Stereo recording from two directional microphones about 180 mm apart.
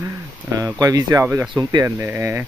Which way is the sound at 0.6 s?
20° right (ahead or behind).